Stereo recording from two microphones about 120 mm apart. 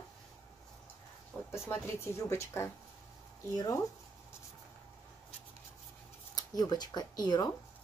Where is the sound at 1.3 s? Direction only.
15° left (ahead or behind).